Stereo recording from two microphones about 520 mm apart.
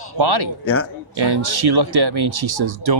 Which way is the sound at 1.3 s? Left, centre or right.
Right.